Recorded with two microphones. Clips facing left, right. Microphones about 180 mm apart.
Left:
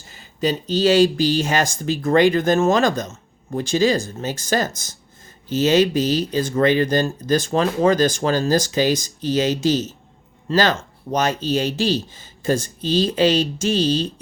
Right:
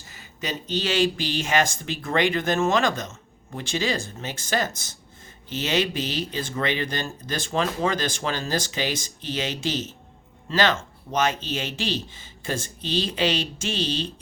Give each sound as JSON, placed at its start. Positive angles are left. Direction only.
{"t": 0.1, "sound": "speech", "side_deg": 30}